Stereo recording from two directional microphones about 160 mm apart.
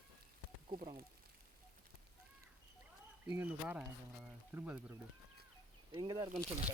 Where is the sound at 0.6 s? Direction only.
30° right (ahead or behind).